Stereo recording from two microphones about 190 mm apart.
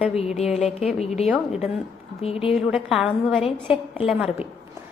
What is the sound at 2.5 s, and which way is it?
A woman's voice, centre (ahead or behind).